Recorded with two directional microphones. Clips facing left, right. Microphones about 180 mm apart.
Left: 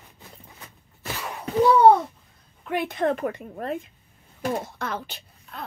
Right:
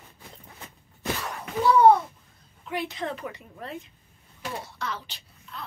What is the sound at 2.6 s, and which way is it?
A woman's voice, 60° left (ahead or behind).